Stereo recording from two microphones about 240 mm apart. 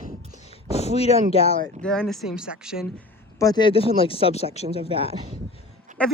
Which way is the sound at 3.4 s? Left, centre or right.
Centre.